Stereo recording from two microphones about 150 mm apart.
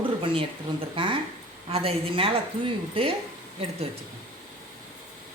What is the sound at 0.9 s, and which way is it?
A woman's voice, 35° right (ahead or behind).